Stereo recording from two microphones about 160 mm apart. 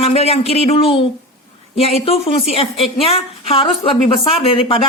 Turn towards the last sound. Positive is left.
turn(degrees=35)  # may be behind; listen again after turning